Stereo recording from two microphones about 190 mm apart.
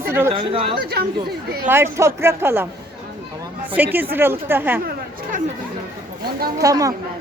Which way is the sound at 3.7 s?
10° right (ahead or behind).